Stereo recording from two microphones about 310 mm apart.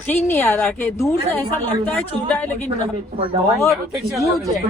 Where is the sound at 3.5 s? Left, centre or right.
Centre.